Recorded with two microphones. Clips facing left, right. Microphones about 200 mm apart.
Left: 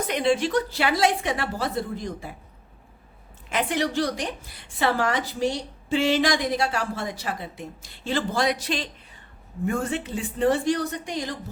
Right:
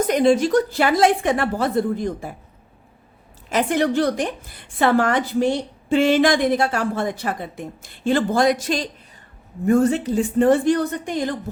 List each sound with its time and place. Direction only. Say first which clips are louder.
0.1 s a woman's voice: right 5 dB; 45° right (ahead or behind)
3.5 s a woman's voice: right 6 dB; 45° right (ahead or behind)